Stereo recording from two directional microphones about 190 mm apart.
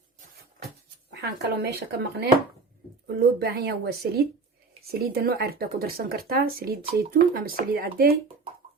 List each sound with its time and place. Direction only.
1.1 s speech: 60° right (ahead or behind)